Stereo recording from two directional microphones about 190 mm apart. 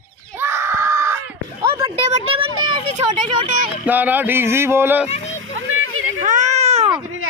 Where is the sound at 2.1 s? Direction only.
30° right (ahead or behind).